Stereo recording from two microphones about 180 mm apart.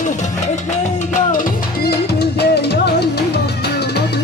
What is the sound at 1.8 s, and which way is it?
Music, 65° left (ahead or behind).